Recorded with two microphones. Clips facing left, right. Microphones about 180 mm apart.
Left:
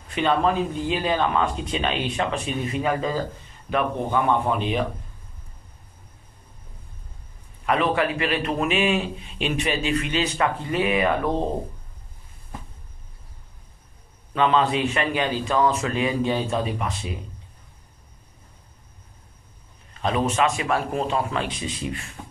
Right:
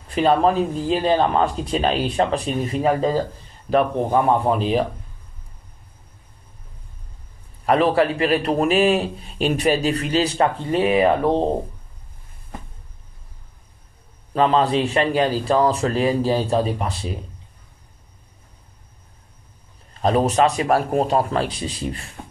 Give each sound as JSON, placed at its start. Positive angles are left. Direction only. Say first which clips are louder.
{"t": 0.1, "sound": "a man's voice", "louder": "right 4 dB", "side_deg": -35}
{"t": 7.6, "sound": "a man's voice", "louder": "right 5 dB", "side_deg": -35}
{"t": 14.3, "sound": "a man's voice", "louder": "right 3 dB", "side_deg": -35}
{"t": 19.9, "sound": "a man's voice", "louder": "right 5 dB", "side_deg": -35}